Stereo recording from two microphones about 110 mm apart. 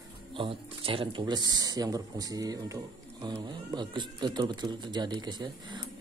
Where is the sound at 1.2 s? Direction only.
40° right (ahead or behind).